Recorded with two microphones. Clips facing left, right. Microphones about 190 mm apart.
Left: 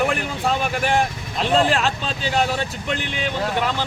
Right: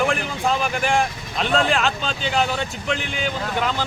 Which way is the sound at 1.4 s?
Centre (ahead or behind).